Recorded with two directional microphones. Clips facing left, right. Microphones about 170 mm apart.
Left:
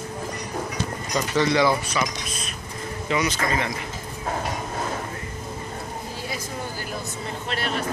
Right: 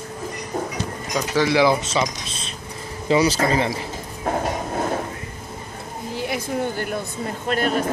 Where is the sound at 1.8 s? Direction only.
25° right (ahead or behind).